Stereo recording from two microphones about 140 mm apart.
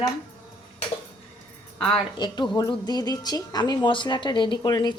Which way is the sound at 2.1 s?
30° left (ahead or behind).